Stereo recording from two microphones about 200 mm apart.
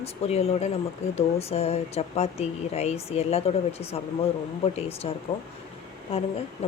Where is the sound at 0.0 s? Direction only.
30° left (ahead or behind).